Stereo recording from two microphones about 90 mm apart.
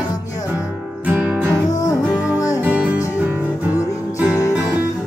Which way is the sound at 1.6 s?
45° left (ahead or behind).